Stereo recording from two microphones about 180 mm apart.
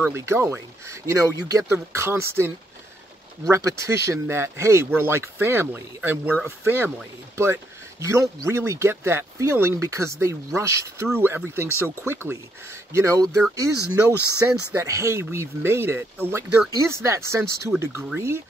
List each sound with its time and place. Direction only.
0.0 s speech: 15° right (ahead or behind)
14.7 s speech: 15° right (ahead or behind)